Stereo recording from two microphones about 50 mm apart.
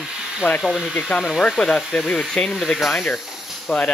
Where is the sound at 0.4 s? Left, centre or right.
Left.